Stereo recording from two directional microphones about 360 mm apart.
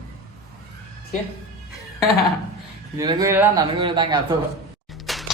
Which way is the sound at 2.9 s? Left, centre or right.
Centre.